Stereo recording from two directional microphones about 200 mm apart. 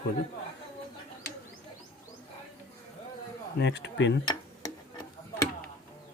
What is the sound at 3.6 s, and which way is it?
Speech, 60° left (ahead or behind).